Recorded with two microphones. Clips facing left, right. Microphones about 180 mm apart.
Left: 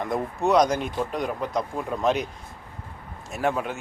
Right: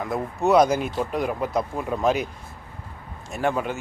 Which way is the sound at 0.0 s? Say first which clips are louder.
Right 1 dB; 5° right (ahead or behind).